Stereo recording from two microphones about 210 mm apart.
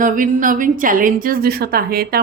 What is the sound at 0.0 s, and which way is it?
A woman's voice, 40° right (ahead or behind).